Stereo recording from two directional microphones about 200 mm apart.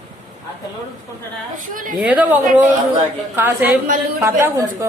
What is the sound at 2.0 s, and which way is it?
A child's voice, 5° right (ahead or behind).